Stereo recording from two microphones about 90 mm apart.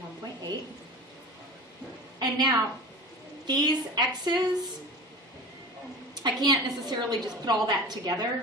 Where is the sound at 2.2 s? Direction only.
50° right (ahead or behind).